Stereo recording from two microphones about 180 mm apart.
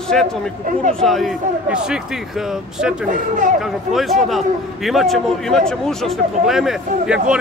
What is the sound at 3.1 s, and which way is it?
Speech, 45° right (ahead or behind).